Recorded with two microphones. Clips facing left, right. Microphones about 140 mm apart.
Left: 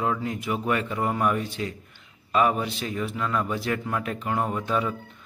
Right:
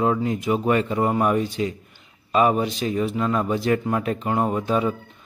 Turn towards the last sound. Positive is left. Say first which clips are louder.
# right 4 dB
turn(degrees=-20)  # may be behind; listen again after turning